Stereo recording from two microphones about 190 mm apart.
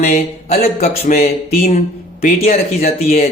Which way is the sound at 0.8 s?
50° left (ahead or behind).